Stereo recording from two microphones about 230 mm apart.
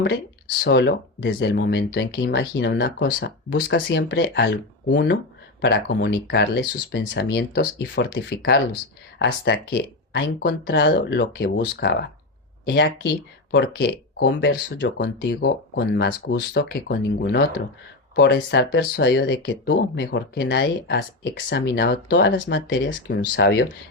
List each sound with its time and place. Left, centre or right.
0.6 s speech: left